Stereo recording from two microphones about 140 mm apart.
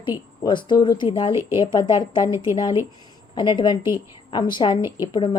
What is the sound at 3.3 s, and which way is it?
A woman's voice, 35° left (ahead or behind).